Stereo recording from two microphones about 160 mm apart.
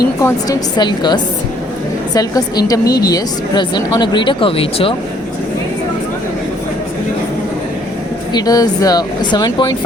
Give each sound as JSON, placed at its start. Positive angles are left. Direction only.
{"t": 0.2, "sound": "speech", "side_deg": 20}
{"t": 8.3, "sound": "speech", "side_deg": 25}